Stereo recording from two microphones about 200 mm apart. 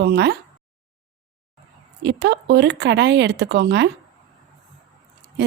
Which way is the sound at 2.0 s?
60° right (ahead or behind).